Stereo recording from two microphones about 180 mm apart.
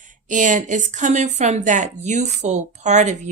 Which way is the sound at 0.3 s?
45° right (ahead or behind).